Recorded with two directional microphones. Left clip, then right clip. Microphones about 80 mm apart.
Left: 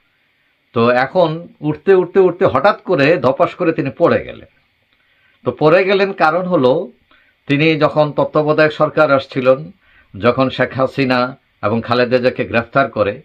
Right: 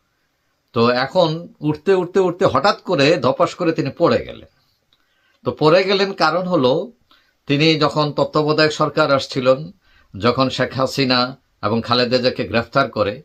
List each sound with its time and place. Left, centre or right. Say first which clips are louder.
0.7 s speech: left 3 dB; right